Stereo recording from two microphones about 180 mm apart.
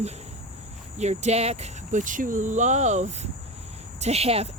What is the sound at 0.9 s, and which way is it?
Speech, 40° right (ahead or behind).